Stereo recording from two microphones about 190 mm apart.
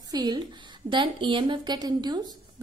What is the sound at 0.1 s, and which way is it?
A woman's voice, 20° right (ahead or behind).